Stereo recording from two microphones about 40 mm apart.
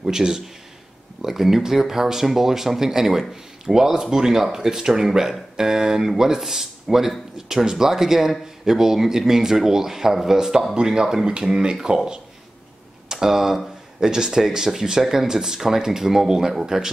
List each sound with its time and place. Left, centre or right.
0.0 s a man's voice: centre